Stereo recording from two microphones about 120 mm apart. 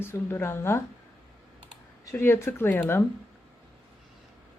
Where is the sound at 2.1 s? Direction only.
20° left (ahead or behind).